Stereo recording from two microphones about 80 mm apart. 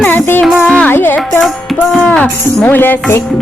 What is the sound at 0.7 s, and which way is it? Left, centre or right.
Speech, centre.